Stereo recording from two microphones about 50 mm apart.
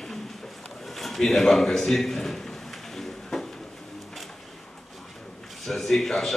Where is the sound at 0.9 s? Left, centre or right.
Centre.